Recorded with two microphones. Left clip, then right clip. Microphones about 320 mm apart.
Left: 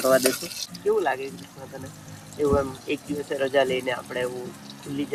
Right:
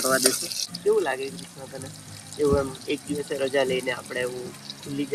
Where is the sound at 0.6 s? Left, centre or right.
Centre.